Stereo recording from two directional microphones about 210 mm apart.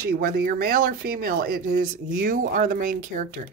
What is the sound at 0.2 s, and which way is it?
Speech, 45° right (ahead or behind).